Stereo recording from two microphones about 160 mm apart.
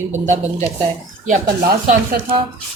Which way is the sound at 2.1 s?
80° right.